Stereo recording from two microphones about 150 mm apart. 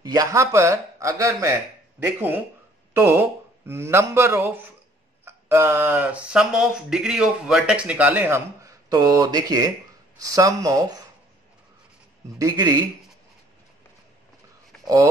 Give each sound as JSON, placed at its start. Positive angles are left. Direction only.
{"t": 0.0, "sound": "speech", "side_deg": -25}
{"t": 12.4, "sound": "speech", "side_deg": -25}